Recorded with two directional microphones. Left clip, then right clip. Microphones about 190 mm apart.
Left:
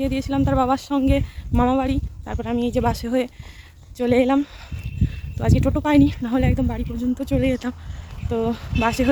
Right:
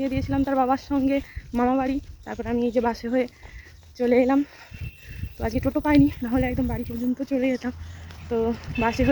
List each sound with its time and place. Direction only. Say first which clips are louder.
0.0 s speech: left 3 dB; 20° left (ahead or behind)